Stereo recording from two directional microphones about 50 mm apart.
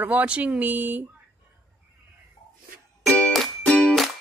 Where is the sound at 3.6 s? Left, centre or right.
Centre.